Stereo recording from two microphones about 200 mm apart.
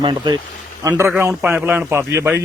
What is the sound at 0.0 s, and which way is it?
Speech, 25° right (ahead or behind).